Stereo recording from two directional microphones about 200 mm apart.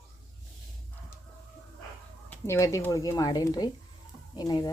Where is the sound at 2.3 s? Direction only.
15° left (ahead or behind).